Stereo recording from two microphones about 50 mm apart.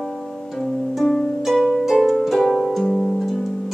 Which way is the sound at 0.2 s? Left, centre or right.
Centre.